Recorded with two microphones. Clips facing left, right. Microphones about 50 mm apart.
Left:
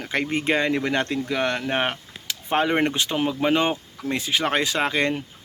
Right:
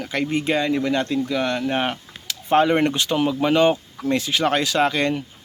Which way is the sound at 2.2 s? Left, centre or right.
Centre.